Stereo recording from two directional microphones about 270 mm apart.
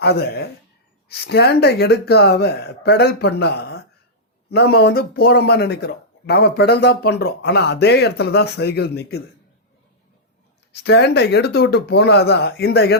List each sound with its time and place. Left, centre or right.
0.0 s speech: left
10.7 s speech: left